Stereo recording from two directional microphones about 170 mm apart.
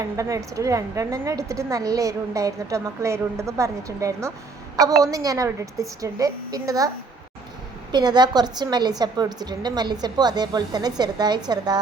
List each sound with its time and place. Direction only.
0.2 s a woman's voice: 20° right (ahead or behind)
7.9 s a woman's voice: 25° right (ahead or behind)